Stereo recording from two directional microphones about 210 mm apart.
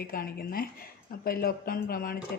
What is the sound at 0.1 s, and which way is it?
A woman's voice, 45° left (ahead or behind).